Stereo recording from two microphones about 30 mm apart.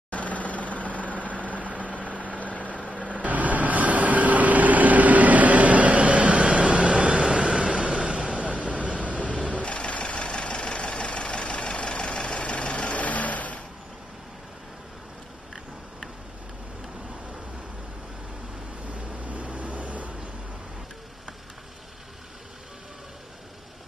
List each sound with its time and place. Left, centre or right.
0.1 s vehicle: left
1.5 s vehicle: right
2.3 s vehicle: left
2.9 s vehicle: right
7.8 s a sound: right
8.4 s vehicle: right
9.5 s a sound: left
9.8 s vehicle: left
18.9 s vehicle: right